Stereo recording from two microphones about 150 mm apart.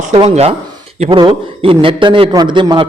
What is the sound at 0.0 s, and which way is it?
A man's voice, 40° right (ahead or behind).